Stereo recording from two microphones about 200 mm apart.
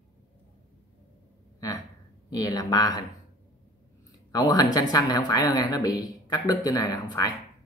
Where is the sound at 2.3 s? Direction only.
20° left (ahead or behind).